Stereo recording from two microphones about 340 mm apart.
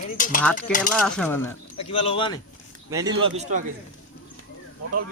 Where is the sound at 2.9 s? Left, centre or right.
Centre.